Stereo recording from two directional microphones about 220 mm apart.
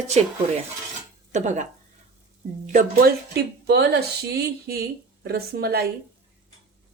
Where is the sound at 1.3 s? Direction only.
35° right (ahead or behind).